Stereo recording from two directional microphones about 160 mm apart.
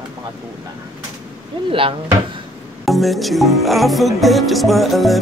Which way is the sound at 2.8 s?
Centre (ahead or behind).